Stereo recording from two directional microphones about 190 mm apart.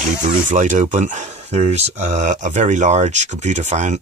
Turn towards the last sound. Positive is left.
turn(degrees=-40)  # may be behind; listen again after turning